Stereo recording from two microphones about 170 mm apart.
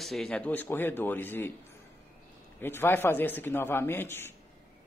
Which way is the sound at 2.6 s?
15° left (ahead or behind).